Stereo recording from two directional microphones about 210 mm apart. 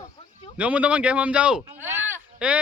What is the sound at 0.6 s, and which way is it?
Speech, 5° right (ahead or behind).